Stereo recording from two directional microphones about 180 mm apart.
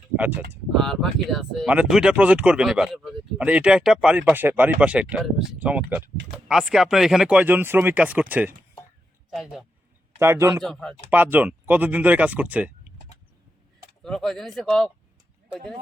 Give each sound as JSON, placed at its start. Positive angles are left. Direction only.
{"t": 0.5, "sound": "speech", "side_deg": 0}
{"t": 10.2, "sound": "speech", "side_deg": -15}
{"t": 10.6, "sound": "speech", "side_deg": 0}
{"t": 11.1, "sound": "speech", "side_deg": -10}
{"t": 14.0, "sound": "speech", "side_deg": 0}